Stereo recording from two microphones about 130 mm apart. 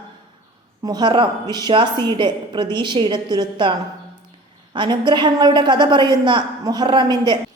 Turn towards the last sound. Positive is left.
turn(degrees=-40)  # may be behind; listen again after turning